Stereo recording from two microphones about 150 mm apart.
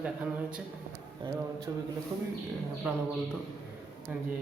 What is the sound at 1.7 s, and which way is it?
Speech, 25° right (ahead or behind).